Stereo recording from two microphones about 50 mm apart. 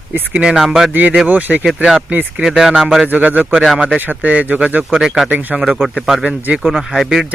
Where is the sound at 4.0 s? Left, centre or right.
Right.